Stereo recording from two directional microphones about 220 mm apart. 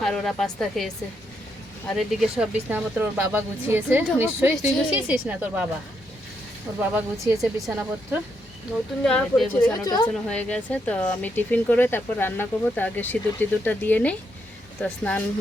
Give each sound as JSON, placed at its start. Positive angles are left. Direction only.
{"t": 0.0, "sound": "speech", "side_deg": 0}
{"t": 1.9, "sound": "speech", "side_deg": 0}
{"t": 6.7, "sound": "speech", "side_deg": -5}
{"t": 9.0, "sound": "speech", "side_deg": 5}
{"t": 9.8, "sound": "speech", "side_deg": 15}
{"t": 10.2, "sound": "speech", "side_deg": 5}